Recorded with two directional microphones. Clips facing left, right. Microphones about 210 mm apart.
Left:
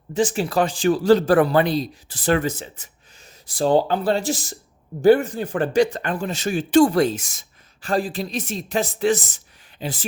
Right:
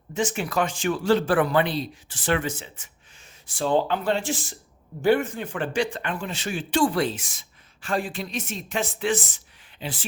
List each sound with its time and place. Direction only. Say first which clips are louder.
0.1 s speech: left 5 dB; 35° left (ahead or behind)